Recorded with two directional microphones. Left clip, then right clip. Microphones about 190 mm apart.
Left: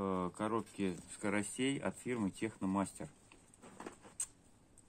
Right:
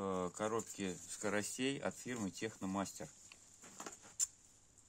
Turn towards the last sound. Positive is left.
turn(degrees=-25)  # may be behind; listen again after turning